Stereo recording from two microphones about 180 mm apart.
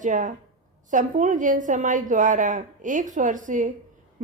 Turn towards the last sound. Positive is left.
turn(degrees=-45)  # may be behind; listen again after turning